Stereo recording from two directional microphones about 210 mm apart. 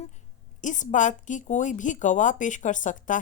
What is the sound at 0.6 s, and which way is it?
Speech, 35° left (ahead or behind).